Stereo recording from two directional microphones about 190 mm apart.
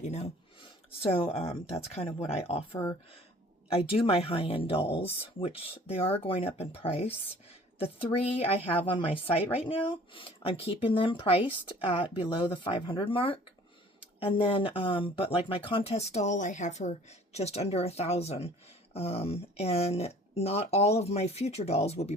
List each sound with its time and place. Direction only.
0.0 s speech: 35° left (ahead or behind)
2.7 s speech: 15° left (ahead or behind)
3.7 s speech: 30° left (ahead or behind)